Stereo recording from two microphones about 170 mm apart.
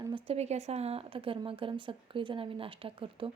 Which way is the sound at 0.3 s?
40° right (ahead or behind).